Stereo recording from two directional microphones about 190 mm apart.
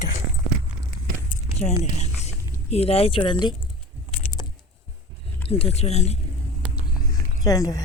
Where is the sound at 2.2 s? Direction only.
35° left (ahead or behind).